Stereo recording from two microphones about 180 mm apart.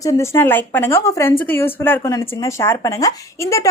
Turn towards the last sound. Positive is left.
turn(degrees=15)  # may be behind; listen again after turning